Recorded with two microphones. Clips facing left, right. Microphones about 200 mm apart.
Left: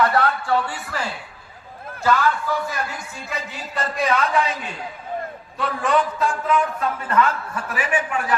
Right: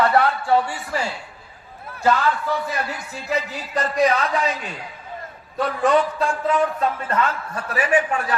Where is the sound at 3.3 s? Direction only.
35° right (ahead or behind).